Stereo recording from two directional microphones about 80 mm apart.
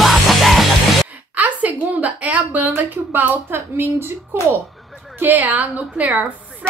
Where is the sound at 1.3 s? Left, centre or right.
Centre.